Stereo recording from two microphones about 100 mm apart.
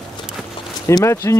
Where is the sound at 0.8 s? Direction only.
30° left (ahead or behind).